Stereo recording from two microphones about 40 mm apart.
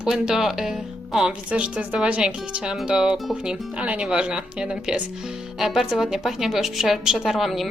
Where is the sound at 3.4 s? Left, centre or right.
Right.